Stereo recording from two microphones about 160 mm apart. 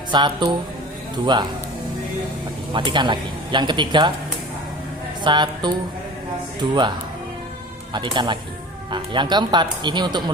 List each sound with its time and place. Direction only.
0.1 s speech: 30° right (ahead or behind)
2.7 s speech: 30° right (ahead or behind)
5.2 s speech: 30° right (ahead or behind)
7.9 s speech: 30° right (ahead or behind)